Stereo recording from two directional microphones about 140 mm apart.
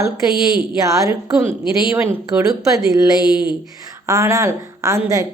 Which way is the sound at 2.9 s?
25° right (ahead or behind).